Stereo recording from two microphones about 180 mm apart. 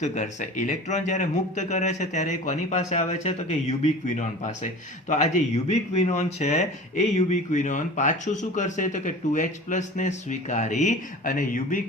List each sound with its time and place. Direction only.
0.0 s speech: 40° left (ahead or behind)